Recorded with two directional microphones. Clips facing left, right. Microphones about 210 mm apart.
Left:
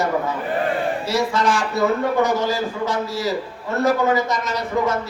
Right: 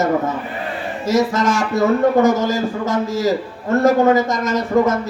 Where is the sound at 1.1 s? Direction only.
45° right (ahead or behind).